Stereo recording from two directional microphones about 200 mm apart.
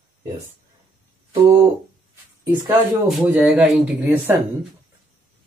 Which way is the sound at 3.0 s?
5° right (ahead or behind).